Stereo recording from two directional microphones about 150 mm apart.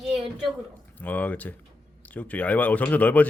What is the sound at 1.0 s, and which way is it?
A man's voice, 10° left (ahead or behind).